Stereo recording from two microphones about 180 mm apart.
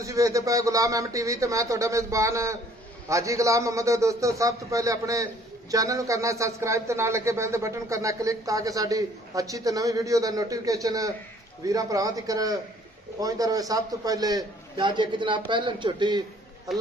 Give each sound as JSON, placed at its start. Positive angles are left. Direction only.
{"t": 0.0, "sound": "speech", "side_deg": -20}